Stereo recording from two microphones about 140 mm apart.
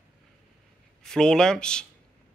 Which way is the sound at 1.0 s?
5° left (ahead or behind).